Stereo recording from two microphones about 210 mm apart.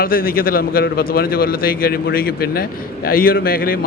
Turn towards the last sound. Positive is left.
turn(degrees=45)  # may be behind; listen again after turning